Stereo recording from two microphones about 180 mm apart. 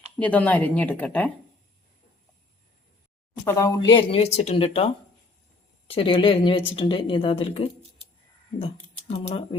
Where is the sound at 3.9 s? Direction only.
30° left (ahead or behind).